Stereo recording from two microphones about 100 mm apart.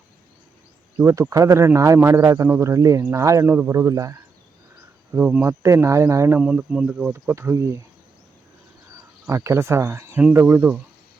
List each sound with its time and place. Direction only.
0.9 s speech: 25° right (ahead or behind)
5.1 s speech: 15° right (ahead or behind)
5.5 s speech: 30° right (ahead or behind)
6.3 s speech: 15° right (ahead or behind)
9.2 s speech: 30° right (ahead or behind)